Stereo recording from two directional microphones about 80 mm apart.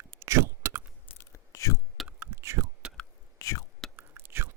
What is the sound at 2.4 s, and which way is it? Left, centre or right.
Whispering, right.